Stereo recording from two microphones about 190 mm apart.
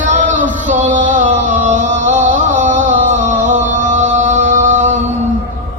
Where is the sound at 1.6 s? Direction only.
40° right (ahead or behind).